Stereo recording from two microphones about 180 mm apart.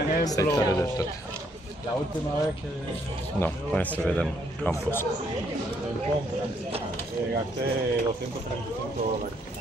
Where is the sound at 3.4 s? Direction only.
10° left (ahead or behind).